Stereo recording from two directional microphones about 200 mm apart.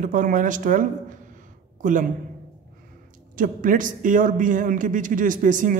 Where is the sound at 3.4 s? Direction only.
40° right (ahead or behind).